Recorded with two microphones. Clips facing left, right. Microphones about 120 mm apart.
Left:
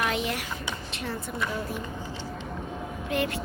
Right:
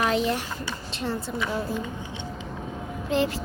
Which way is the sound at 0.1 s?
35° right (ahead or behind).